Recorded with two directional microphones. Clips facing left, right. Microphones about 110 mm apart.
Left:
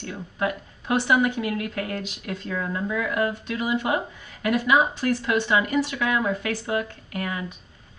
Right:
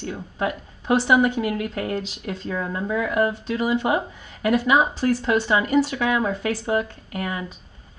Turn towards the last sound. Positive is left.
turn(degrees=-25)  # may be behind; listen again after turning